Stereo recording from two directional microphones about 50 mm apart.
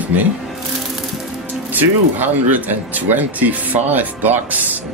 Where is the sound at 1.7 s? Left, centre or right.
Right.